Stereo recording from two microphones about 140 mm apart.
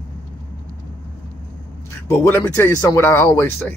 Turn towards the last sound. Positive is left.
turn(degrees=15)  # may be behind; listen again after turning